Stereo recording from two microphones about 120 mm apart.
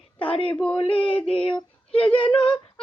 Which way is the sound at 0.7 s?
50° left (ahead or behind).